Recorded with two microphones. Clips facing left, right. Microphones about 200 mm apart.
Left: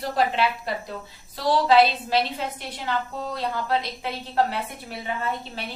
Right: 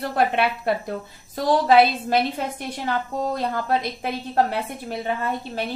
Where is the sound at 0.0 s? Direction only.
55° right (ahead or behind).